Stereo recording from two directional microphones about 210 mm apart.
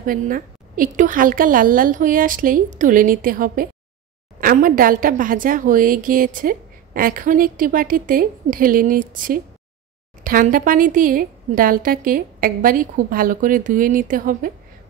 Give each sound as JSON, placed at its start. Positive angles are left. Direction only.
{"t": 0.0, "sound": "a woman's voice", "side_deg": -40}